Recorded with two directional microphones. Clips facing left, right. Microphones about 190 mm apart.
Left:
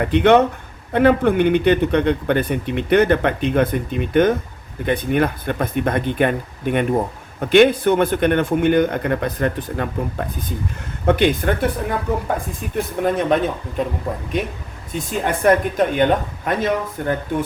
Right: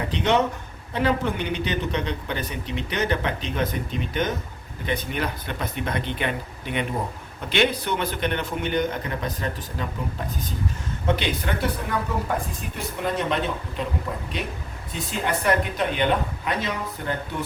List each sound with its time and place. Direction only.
0.0 s a man's voice: 60° left (ahead or behind)